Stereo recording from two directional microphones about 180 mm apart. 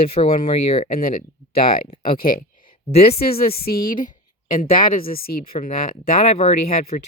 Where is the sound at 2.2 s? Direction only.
55° left (ahead or behind).